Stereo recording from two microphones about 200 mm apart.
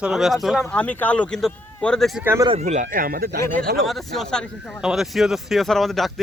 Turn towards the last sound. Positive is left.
turn(degrees=0)  # may be behind; listen again after turning